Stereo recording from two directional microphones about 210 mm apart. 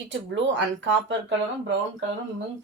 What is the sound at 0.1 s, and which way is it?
A woman's voice, 60° right (ahead or behind).